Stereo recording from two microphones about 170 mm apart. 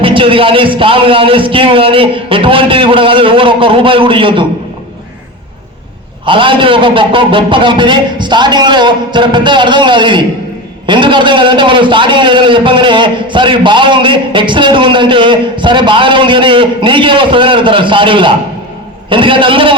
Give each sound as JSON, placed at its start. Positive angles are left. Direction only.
{"t": 0.0, "sound": "a man's voice", "side_deg": -30}
{"t": 6.2, "sound": "a man's voice", "side_deg": -30}